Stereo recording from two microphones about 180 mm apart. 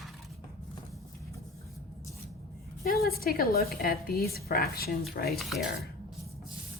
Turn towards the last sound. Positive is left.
turn(degrees=0)  # may be behind; listen again after turning